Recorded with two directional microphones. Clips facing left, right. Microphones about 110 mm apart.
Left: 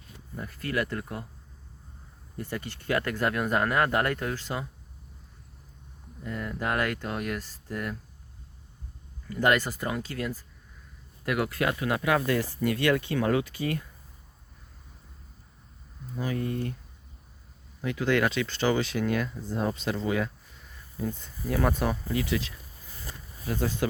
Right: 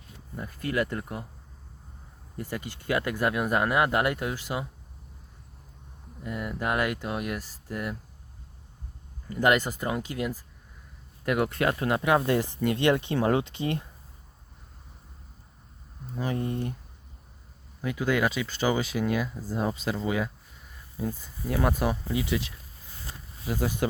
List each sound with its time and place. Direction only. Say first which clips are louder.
0.4 s speech: right 2 dB; 20° right (ahead or behind)
2.5 s speech: even; 15° right (ahead or behind)
6.3 s speech: right 1 dB; 15° right (ahead or behind)
9.4 s speech: right 1 dB; 20° right (ahead or behind)
11.3 s speech: right 2 dB; 30° right (ahead or behind)
16.2 s speech: right 1 dB; 25° right (ahead or behind)
17.9 s speech: left 1 dB; 10° right (ahead or behind)